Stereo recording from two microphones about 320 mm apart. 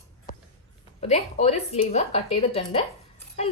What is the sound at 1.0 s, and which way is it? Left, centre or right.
Speech, centre.